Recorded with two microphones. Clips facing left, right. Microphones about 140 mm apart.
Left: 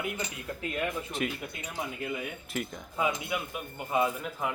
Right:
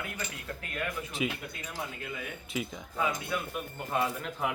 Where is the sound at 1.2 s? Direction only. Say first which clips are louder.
Right 1 dB; 5° right (ahead or behind).